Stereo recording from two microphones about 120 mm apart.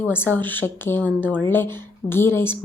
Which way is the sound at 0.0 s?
15° left (ahead or behind).